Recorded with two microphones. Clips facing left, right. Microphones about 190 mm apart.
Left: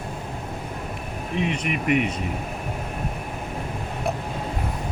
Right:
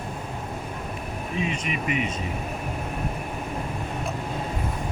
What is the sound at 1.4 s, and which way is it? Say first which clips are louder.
Speech: left 3 dB; 65° left (ahead or behind).